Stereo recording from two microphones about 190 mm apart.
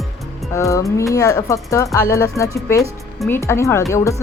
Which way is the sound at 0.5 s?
15° left (ahead or behind).